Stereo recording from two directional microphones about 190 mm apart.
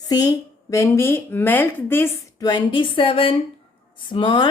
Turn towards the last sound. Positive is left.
turn(degrees=25)  # may be behind; listen again after turning